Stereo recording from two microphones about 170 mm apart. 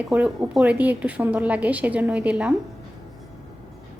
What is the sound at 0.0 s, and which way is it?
A woman's voice, 10° right (ahead or behind).